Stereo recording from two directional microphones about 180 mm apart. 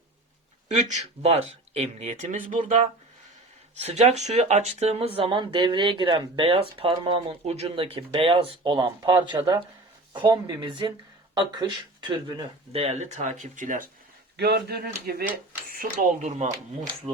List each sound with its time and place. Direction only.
0.7 s speech: 40° right (ahead or behind)
3.8 s speech: 35° right (ahead or behind)
12.7 s speech: 35° right (ahead or behind)
14.3 s speech: 65° right (ahead or behind)
15.7 s speech: 45° right (ahead or behind)